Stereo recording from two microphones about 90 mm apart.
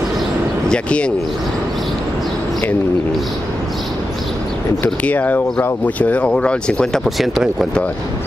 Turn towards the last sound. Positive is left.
turn(degrees=-5)  # may be behind; listen again after turning